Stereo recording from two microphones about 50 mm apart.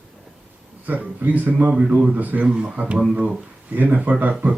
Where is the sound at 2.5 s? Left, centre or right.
Right.